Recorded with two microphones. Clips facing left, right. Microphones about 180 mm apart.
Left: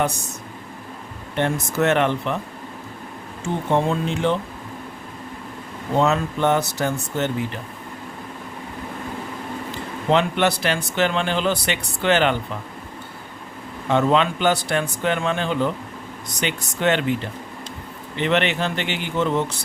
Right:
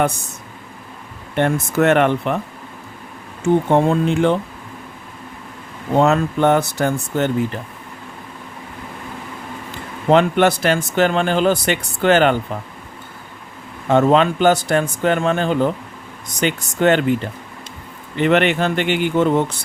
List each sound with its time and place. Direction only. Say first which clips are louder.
1.4 s speech: right 4 dB; 55° right (ahead or behind)
3.7 s speech: right 5 dB; 50° right (ahead or behind)
6.0 s speech: right 4 dB; 55° right (ahead or behind)
10.1 s speech: right 5 dB; 50° right (ahead or behind)
13.8 s speech: right 5 dB; 45° right (ahead or behind)
18.2 s speech: right 5 dB; 50° right (ahead or behind)